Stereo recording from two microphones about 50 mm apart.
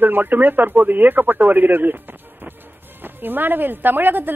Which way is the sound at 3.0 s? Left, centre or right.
Right.